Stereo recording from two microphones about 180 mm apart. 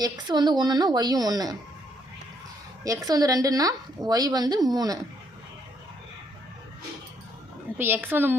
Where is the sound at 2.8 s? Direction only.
20° right (ahead or behind).